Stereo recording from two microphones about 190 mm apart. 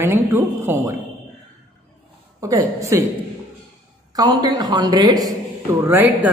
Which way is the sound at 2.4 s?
15° right (ahead or behind).